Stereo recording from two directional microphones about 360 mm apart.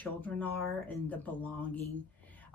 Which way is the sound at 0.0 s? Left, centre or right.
Centre.